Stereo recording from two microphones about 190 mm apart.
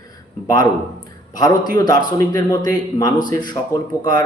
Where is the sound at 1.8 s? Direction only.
20° left (ahead or behind).